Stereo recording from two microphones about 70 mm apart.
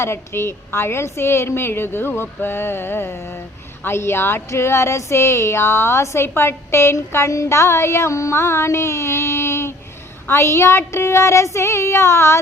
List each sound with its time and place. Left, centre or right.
0.0 s speech: left